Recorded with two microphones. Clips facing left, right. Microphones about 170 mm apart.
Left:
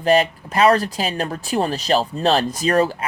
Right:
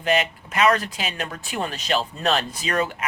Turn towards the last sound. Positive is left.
turn(degrees=35)  # may be behind; listen again after turning